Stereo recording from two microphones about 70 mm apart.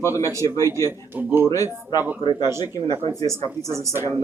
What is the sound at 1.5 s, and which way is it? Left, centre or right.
Speech, left.